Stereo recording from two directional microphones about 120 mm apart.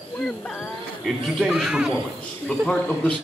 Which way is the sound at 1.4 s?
5° right (ahead or behind).